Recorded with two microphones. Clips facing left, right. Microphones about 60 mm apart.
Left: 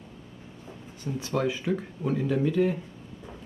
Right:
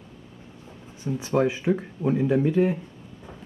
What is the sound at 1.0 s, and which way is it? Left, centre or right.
Speech, right.